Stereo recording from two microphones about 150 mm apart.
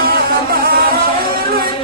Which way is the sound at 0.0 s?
85° right.